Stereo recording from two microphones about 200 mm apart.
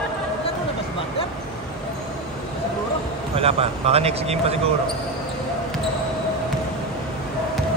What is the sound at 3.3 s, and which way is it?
Speech, 30° right (ahead or behind).